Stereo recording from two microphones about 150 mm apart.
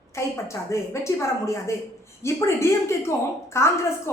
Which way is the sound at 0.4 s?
20° left (ahead or behind).